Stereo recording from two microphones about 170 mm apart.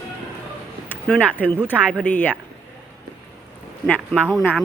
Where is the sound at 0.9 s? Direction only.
5° left (ahead or behind).